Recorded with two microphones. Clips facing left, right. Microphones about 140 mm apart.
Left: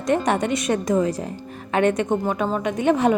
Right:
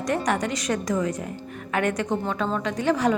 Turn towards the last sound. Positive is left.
turn(degrees=25)  # may be behind; listen again after turning